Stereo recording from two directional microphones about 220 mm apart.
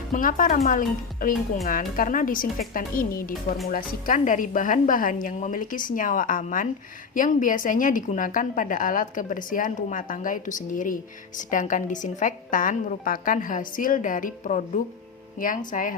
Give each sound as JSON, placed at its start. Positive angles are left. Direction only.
{"t": 0.1, "sound": "a woman's voice", "side_deg": 40}